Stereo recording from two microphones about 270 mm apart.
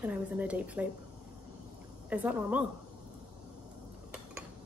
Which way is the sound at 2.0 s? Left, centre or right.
Centre.